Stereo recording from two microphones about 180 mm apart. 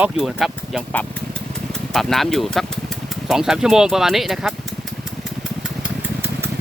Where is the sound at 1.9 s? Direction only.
Centre (ahead or behind).